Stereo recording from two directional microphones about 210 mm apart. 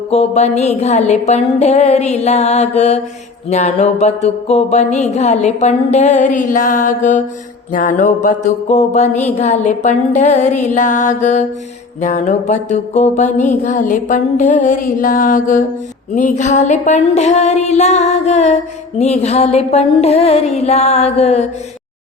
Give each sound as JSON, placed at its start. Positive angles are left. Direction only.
{"t": 0.1, "sound": "music", "side_deg": 30}